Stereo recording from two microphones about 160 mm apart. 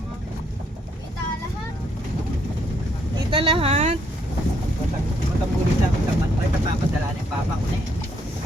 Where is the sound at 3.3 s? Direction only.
30° right (ahead or behind).